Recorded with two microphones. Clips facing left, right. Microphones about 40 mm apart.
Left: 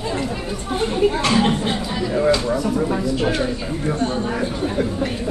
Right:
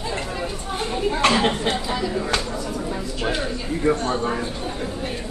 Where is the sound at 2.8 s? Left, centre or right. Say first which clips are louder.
Left 7 dB; left.